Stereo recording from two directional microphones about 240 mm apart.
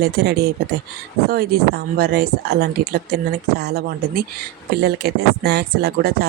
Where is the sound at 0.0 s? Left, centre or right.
Right.